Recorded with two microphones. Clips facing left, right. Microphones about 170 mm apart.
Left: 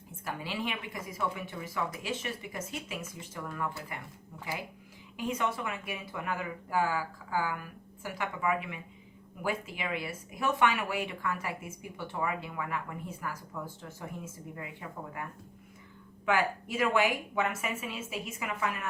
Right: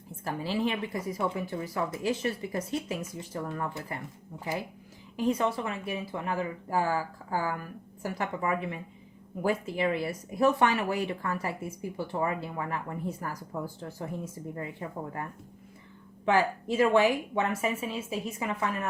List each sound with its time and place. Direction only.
0.3 s speech: 35° right (ahead or behind)